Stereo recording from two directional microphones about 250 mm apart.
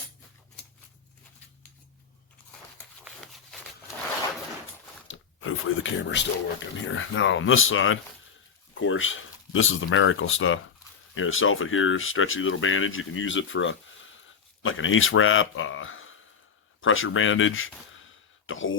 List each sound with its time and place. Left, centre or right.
2.5 s biting: centre
3.0 s a sound: centre
5.0 s speech: left